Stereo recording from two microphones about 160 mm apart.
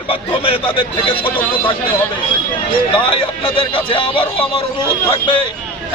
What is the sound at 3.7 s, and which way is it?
Speech, 30° left (ahead or behind).